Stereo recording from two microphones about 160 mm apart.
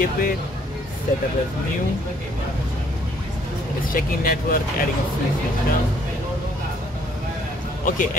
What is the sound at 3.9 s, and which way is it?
Speech, 65° left (ahead or behind).